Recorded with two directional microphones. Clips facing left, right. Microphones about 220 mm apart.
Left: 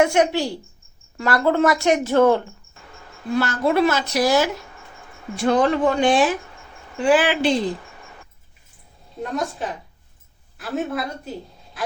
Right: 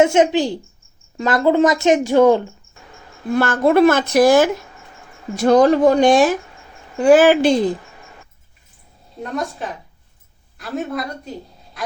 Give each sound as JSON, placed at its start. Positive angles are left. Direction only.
{"t": 0.0, "sound": "a woman's voice", "side_deg": -20}
{"t": 3.3, "sound": "speech", "side_deg": -50}
{"t": 5.4, "sound": "speech", "side_deg": -40}
{"t": 9.2, "sound": "a woman's voice", "side_deg": 0}